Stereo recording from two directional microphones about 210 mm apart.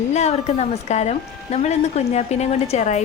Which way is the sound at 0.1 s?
30° left (ahead or behind).